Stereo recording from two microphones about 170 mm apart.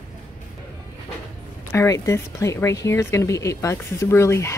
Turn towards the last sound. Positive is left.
turn(degrees=15)  # may be behind; listen again after turning